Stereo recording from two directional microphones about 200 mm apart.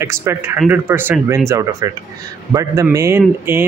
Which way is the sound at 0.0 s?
15° right (ahead or behind).